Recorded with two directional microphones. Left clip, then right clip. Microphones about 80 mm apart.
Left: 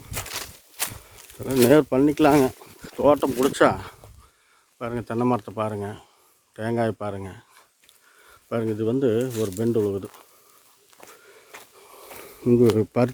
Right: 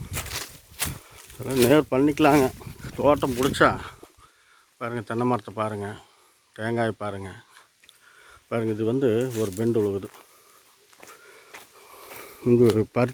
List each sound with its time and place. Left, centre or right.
0.3 s a sound: centre
1.0 s a sound: left
1.6 s speech: left
1.9 s speech: centre
2.9 s speech: left
3.2 s speech: left
3.6 s speech: left
4.8 s speech: left
6.5 s speech: left
8.4 s speech: centre
9.3 s speech: left
9.6 s speech: centre
11.1 s a sound: centre
12.7 s speech: centre